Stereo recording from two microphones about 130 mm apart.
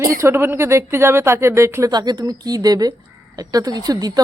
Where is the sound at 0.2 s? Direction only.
20° right (ahead or behind).